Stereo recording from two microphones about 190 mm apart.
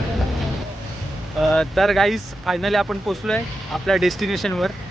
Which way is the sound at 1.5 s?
Centre (ahead or behind).